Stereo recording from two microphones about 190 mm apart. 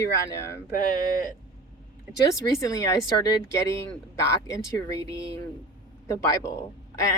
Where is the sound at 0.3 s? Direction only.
15° left (ahead or behind).